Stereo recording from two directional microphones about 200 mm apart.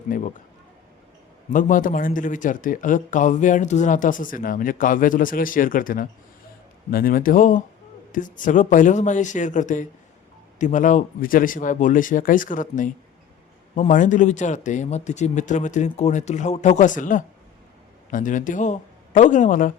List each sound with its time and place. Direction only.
0.1 s a man's voice: 45° left (ahead or behind)
1.5 s a man's voice: 40° left (ahead or behind)